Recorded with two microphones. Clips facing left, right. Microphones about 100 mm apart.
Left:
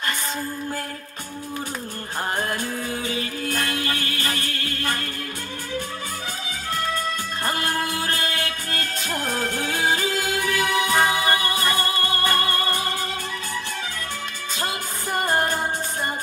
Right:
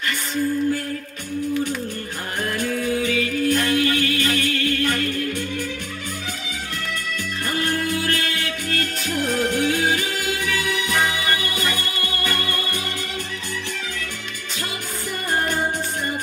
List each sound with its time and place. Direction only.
3.1 s music: 35° left (ahead or behind)
8.0 s music: 40° left (ahead or behind)
15.2 s music: 45° left (ahead or behind)